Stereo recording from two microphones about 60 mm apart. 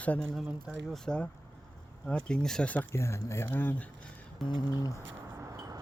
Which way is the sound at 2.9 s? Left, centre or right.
Left.